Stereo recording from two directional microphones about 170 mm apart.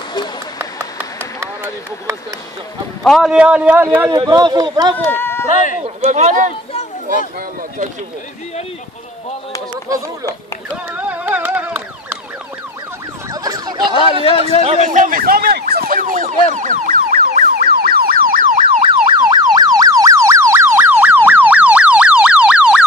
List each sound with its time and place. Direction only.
1.4 s speech: 15° right (ahead or behind)
3.0 s a man's voice: centre (ahead or behind)
4.1 s speech: 25° right (ahead or behind)
4.9 s speech: 15° left (ahead or behind)
5.5 s speech: 50° left (ahead or behind)
6.0 s speech: 45° right (ahead or behind)
10.9 s carnatic music: 10° right (ahead or behind)
13.3 s emergency vehicle: 20° right (ahead or behind)
14.6 s speech: 40° right (ahead or behind)
16.5 s car alarm: 50° right (ahead or behind)
18.8 s car alarm: 30° right (ahead or behind); by 22.8 s 5° right (ahead or behind)